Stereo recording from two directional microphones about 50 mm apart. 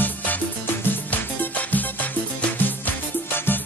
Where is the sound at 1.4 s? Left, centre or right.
Left.